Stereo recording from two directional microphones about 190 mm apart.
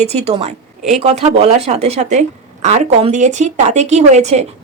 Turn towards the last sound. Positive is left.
turn(degrees=-35)  # may be behind; listen again after turning